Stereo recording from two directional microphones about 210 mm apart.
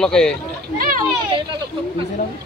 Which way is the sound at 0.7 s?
40° right (ahead or behind).